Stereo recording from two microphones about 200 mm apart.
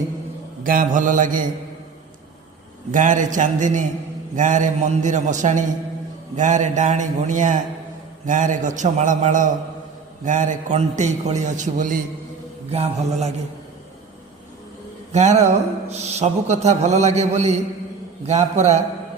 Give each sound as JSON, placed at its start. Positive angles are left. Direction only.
{"t": 0.6, "sound": "mantra", "side_deg": -45}
{"t": 2.9, "sound": "speech", "side_deg": -40}
{"t": 15.1, "sound": "speech", "side_deg": -35}